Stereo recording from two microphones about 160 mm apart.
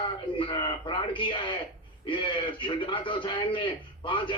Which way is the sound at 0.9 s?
30° left (ahead or behind).